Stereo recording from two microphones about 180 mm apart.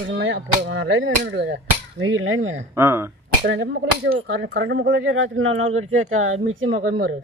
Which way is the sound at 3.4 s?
90° right.